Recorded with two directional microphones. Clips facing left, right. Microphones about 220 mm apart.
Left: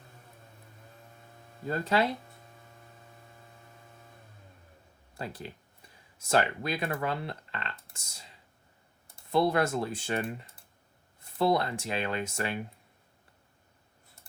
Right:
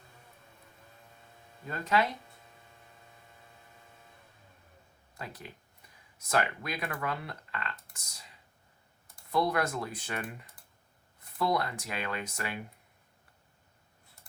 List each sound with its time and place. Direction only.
1.6 s speech: 35° left (ahead or behind)
5.1 s speech: 30° left (ahead or behind)